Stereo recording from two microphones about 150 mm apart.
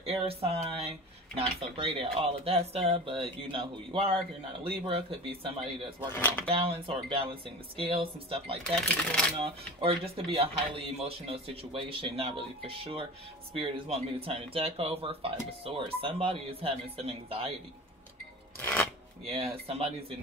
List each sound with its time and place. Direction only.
0.0 s speech: 40° right (ahead or behind)
6.1 s speech: 10° left (ahead or behind)
6.4 s speech: 40° right (ahead or behind)
18.6 s speech: 10° left (ahead or behind)
19.2 s speech: 40° right (ahead or behind)